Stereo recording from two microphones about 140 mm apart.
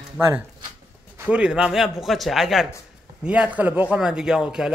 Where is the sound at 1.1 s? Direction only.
10° right (ahead or behind).